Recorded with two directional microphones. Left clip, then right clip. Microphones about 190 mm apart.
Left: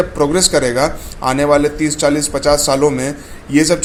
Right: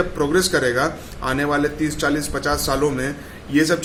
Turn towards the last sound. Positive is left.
turn(degrees=30)  # may be behind; listen again after turning